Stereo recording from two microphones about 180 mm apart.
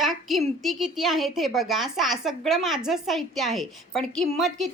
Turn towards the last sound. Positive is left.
turn(degrees=0)  # may be behind; listen again after turning